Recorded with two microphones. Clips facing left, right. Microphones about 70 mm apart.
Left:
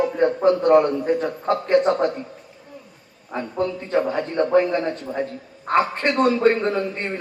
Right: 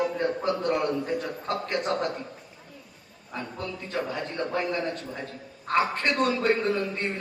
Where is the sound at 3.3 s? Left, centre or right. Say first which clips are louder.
Left 10 dB; left.